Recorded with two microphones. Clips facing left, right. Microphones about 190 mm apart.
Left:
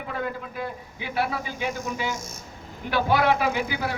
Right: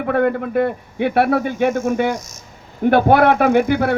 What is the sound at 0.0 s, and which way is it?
A man's voice, 60° right (ahead or behind).